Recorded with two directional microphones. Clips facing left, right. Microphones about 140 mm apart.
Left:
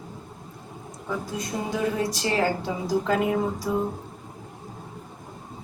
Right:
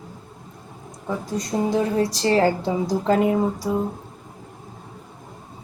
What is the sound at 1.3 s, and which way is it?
Speech, 35° right (ahead or behind).